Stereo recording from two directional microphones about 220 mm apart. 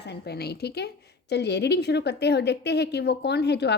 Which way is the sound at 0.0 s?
50° left (ahead or behind).